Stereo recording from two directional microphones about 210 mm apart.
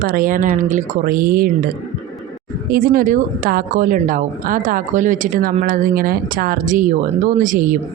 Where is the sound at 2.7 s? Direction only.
45° right (ahead or behind).